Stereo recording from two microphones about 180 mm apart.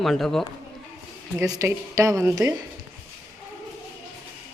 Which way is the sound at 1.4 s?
15° right (ahead or behind).